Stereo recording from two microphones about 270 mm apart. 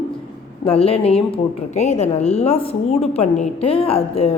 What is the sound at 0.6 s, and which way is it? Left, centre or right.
A woman's voice, left.